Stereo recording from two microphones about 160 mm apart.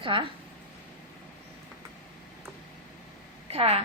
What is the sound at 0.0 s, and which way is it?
Speech, 35° right (ahead or behind).